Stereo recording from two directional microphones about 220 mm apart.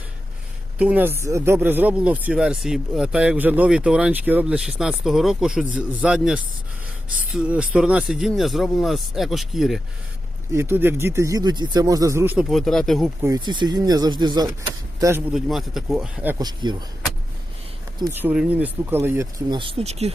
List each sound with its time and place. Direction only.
0.8 s speech: 5° right (ahead or behind)
10.5 s speech: 10° right (ahead or behind)
13.2 s speech: 15° right (ahead or behind)
15.0 s speech: 5° right (ahead or behind)
18.0 s speech: 10° right (ahead or behind); by 20.1 s 30° right (ahead or behind)